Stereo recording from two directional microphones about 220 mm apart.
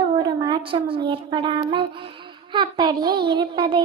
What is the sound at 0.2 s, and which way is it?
A child's voice, 20° right (ahead or behind).